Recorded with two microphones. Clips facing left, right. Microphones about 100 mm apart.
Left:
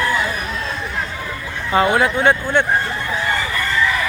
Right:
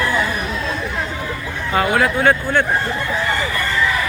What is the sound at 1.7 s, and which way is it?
Speech, 25° left (ahead or behind).